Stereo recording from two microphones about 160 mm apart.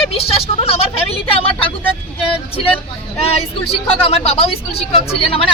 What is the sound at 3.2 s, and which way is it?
Speech, 40° left (ahead or behind).